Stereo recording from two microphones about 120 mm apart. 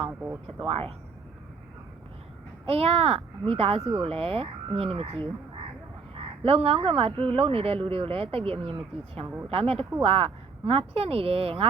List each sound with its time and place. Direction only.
0.1 s speech: 10° right (ahead or behind)
0.7 s speech: 60° right (ahead or behind)
2.6 s speech: 55° right (ahead or behind)
6.4 s speech: 55° right (ahead or behind)